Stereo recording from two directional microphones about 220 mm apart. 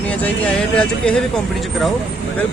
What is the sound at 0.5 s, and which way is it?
Speech, 5° left (ahead or behind).